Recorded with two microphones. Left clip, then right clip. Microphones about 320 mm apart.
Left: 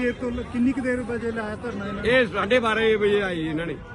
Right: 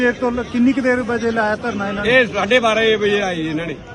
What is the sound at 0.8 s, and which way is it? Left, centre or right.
Speech, right.